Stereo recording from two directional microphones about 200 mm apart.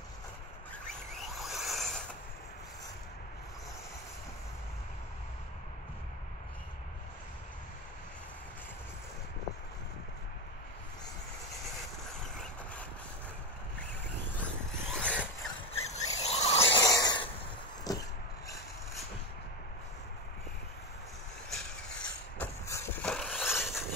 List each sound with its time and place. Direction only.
1.1 s a sound: centre (ahead or behind)
12.1 s vehicle: 5° left (ahead or behind)
14.4 s zipper: 5° left (ahead or behind)
15.7 s vehicle: 35° left (ahead or behind)
21.5 s vehicle: 5° left (ahead or behind)